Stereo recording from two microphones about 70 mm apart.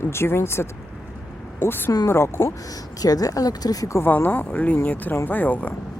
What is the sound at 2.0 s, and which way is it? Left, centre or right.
Speech, left.